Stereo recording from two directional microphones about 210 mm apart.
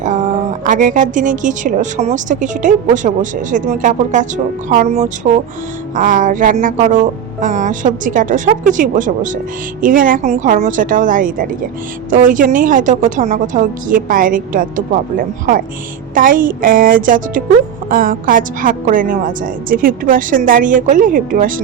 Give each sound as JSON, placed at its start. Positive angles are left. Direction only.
{"t": 0.0, "sound": "a woman's voice", "side_deg": -35}
{"t": 16.1, "sound": "a woman's voice", "side_deg": -40}